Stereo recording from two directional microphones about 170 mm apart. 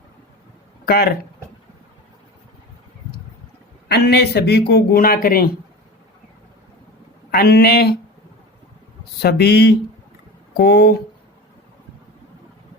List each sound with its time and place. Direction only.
0.9 s speech: 65° left (ahead or behind)
3.9 s speech: 75° left (ahead or behind); by 5.5 s 55° left (ahead or behind)
7.3 s speech: 65° left (ahead or behind)
9.2 s speech: 70° left (ahead or behind)